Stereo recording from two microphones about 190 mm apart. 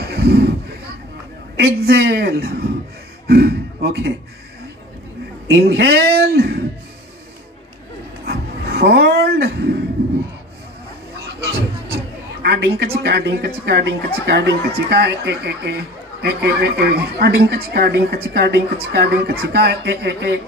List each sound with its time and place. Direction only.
0.0 s a sound: 60° right (ahead or behind)
1.6 s a woman's voice: 60° right (ahead or behind)
5.5 s a woman's voice: 60° right (ahead or behind)
8.3 s speech: 55° right (ahead or behind)
12.4 s a woman's voice: 60° right (ahead or behind)